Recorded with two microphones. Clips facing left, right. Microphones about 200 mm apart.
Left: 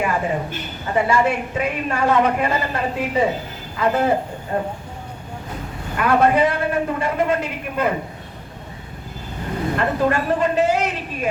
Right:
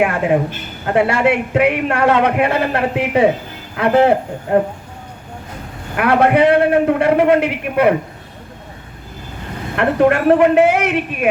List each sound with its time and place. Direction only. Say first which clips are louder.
0.0 s a man's voice: right 7 dB; 70° right (ahead or behind)
6.0 s a man's voice: right 4 dB; 70° right (ahead or behind)
9.7 s a man's voice: right 7 dB; 65° right (ahead or behind)